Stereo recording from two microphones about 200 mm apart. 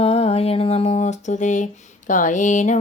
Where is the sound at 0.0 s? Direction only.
30° left (ahead or behind).